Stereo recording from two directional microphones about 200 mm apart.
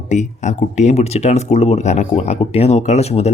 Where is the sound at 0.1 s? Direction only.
35° left (ahead or behind).